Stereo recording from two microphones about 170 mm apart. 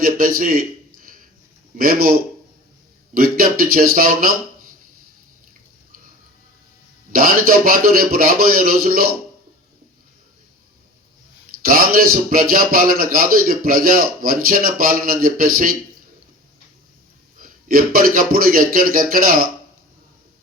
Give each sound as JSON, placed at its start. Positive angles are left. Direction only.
{"t": 0.0, "sound": "a man's voice", "side_deg": -55}
{"t": 1.8, "sound": "a man's voice", "side_deg": -60}
{"t": 3.2, "sound": "a man's voice", "side_deg": -60}
{"t": 7.1, "sound": "a man's voice", "side_deg": -60}
{"t": 11.6, "sound": "a man's voice", "side_deg": -60}
{"t": 17.3, "sound": "a man's voice", "side_deg": -60}